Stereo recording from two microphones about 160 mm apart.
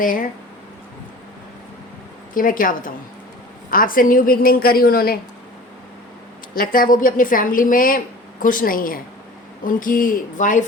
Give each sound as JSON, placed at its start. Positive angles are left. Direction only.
{"t": 0.0, "sound": "speech", "side_deg": 60}
{"t": 2.3, "sound": "speech", "side_deg": 60}
{"t": 6.5, "sound": "speech", "side_deg": 60}